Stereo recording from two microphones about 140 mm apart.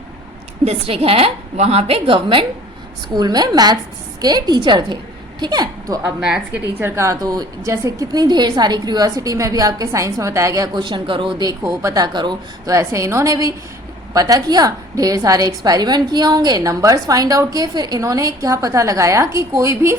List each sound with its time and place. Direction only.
0.6 s a woman's voice: 45° right (ahead or behind); by 6.1 s 25° right (ahead or behind)
6.1 s a woman's voice: 5° right (ahead or behind); by 11.5 s 30° right (ahead or behind)
11.6 s a woman's voice: 20° right (ahead or behind)